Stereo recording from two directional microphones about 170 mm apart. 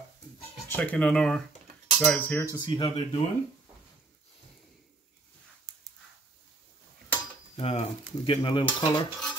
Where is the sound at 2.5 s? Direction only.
25° left (ahead or behind).